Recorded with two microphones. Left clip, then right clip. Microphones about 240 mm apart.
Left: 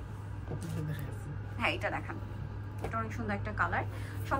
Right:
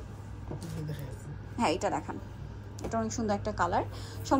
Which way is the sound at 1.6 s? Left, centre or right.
Right.